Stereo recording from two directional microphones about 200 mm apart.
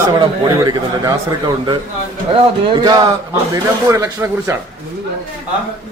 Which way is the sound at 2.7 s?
20° right (ahead or behind).